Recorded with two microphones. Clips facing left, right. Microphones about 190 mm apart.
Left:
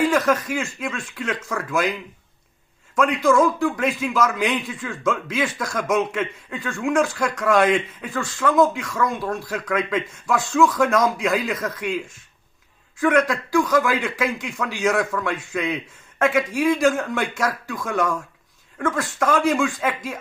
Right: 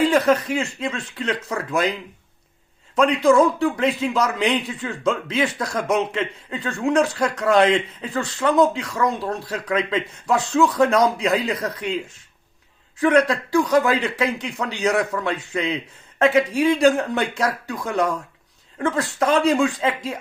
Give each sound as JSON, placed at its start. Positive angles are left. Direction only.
{"t": 0.0, "sound": "speech", "side_deg": -30}
{"t": 2.9, "sound": "speech", "side_deg": -30}
{"t": 13.0, "sound": "speech", "side_deg": -30}